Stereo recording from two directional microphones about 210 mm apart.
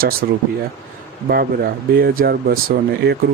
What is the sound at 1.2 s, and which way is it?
Speech, 45° right (ahead or behind).